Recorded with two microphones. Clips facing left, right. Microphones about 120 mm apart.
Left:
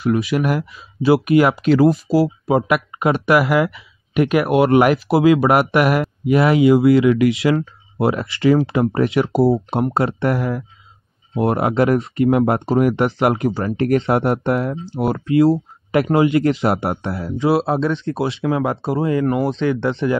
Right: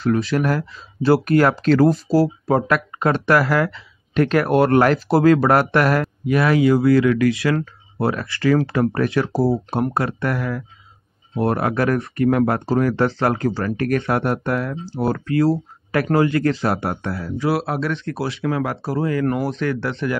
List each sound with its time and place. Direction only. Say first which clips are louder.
0.0 s speech: left 1 dB; 5° left (ahead or behind); by 20.2 s 25° left (ahead or behind)